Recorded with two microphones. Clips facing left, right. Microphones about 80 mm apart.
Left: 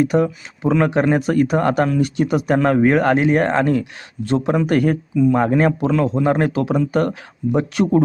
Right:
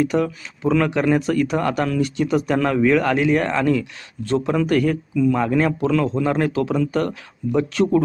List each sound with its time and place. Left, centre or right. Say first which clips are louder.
0.2 s speech: left 3 dB; left
0.9 s speech: left 2 dB; left
1.9 s speech: left 2 dB; centre
2.6 s speech: left 3 dB; left
4.3 s speech: left 1 dB; left
5.8 s speech: left 2 dB; centre